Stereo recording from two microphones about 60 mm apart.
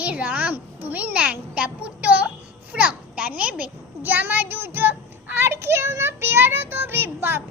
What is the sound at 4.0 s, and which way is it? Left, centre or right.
Child singing, right.